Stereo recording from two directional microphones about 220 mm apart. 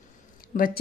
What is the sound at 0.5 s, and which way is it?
Speech, 35° left (ahead or behind).